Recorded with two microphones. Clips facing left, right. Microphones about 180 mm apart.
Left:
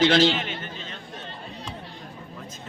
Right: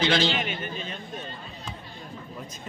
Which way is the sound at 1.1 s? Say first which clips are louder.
Right 2 dB; 75° left (ahead or behind).